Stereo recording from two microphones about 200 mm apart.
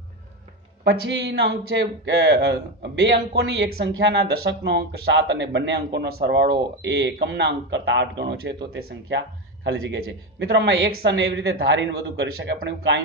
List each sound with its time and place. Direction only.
0.8 s speech: 60° right (ahead or behind)
9.7 s speech: 70° right (ahead or behind)
12.5 s speech: 60° right (ahead or behind)